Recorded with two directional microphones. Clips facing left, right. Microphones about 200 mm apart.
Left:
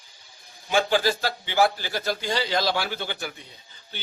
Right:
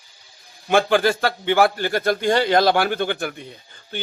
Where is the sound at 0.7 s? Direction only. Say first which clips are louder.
Right 5 dB; 55° right (ahead or behind).